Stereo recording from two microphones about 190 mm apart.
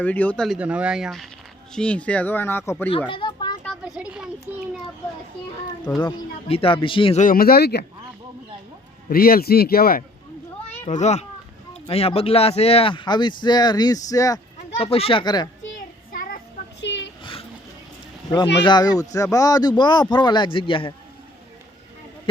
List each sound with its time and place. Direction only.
0.0 s speech: 10° left (ahead or behind)
3.1 s children playing: 25° left (ahead or behind)
3.6 s a sound: centre (ahead or behind)
5.8 s speech: 5° left (ahead or behind)
6.1 s speech: 30° left (ahead or behind)
7.2 s a man's voice: 50° left (ahead or behind)
9.0 s a man's voice: 50° left (ahead or behind)
10.8 s a child's voice: 35° left (ahead or behind); by 14.4 s 20° left (ahead or behind)
14.8 s speech: 30° left (ahead or behind)
16.1 s child singing: 45° left (ahead or behind)
16.8 s oink: 70° left (ahead or behind)
18.6 s speech: 20° left (ahead or behind)